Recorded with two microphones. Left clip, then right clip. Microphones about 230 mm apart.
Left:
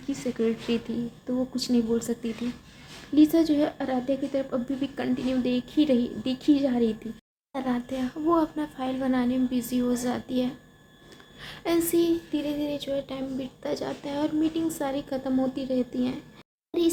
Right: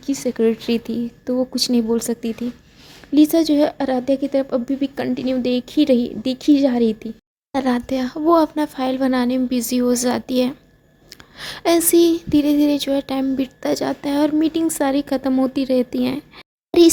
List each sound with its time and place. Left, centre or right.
0.0 s a woman's voice: right
7.5 s a sound: right
16.7 s a child's voice: right